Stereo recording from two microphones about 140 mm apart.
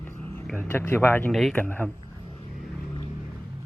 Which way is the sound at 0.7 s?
15° left (ahead or behind).